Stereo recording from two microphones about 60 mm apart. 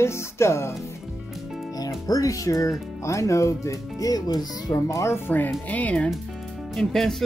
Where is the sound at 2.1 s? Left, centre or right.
Left.